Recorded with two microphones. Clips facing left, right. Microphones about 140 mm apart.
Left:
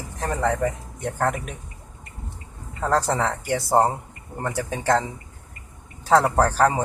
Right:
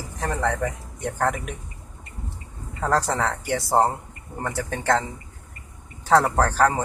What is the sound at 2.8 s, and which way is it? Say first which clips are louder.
A man's voice: left 1 dB; 5° left (ahead or behind).